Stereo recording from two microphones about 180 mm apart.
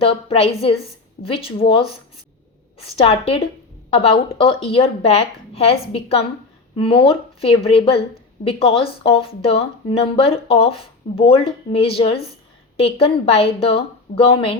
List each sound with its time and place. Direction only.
0.0 s speech: 30° left (ahead or behind)